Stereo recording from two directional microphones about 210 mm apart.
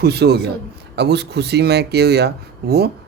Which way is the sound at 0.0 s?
50° right (ahead or behind).